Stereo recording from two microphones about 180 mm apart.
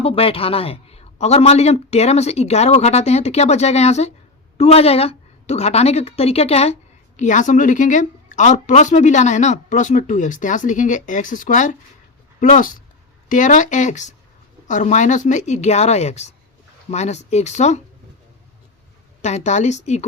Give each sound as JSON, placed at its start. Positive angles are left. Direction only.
{"t": 0.0, "sound": "speech", "side_deg": 30}
{"t": 19.2, "sound": "speech", "side_deg": 40}